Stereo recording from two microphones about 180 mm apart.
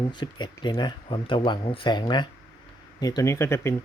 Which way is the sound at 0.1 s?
25° left (ahead or behind).